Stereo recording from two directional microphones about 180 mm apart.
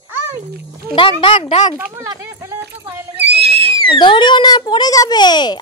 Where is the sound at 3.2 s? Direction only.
30° right (ahead or behind).